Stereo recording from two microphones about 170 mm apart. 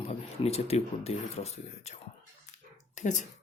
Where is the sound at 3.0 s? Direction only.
45° left (ahead or behind).